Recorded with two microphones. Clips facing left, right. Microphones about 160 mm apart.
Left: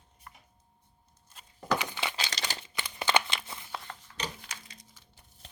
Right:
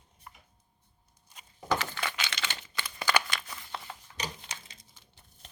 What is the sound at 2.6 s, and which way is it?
Crumpling, 20° left (ahead or behind).